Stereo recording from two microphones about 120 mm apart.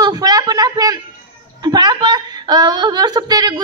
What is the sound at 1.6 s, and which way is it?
A woman's voice, 35° right (ahead or behind).